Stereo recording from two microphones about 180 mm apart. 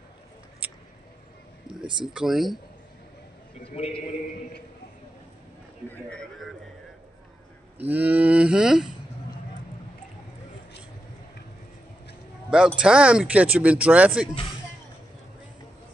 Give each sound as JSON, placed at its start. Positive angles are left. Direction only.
{"t": 0.6, "sound": "a sound", "side_deg": -10}
{"t": 1.7, "sound": "speech", "side_deg": -30}
{"t": 2.1, "sound": "speech", "side_deg": 0}
{"t": 3.6, "sound": "a man's voice", "side_deg": 30}
{"t": 5.9, "sound": "speech", "side_deg": 5}
{"t": 7.8, "sound": "speech", "side_deg": -10}
{"t": 12.4, "sound": "speech", "side_deg": -5}